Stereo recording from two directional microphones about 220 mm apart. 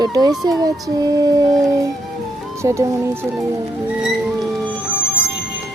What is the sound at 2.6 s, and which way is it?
Speech, 15° right (ahead or behind).